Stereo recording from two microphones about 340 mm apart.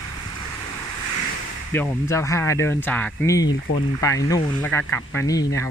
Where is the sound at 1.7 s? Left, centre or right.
Centre.